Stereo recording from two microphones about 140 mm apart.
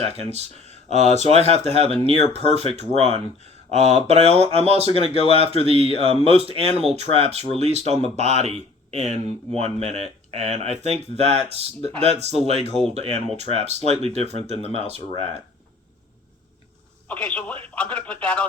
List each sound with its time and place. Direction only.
0.0 s speech: 45° right (ahead or behind)
17.1 s telephone: 10° left (ahead or behind)